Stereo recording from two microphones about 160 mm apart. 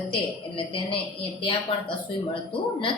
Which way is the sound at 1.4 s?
35° left (ahead or behind).